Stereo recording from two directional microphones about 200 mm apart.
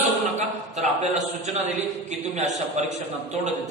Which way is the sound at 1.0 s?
35° right (ahead or behind).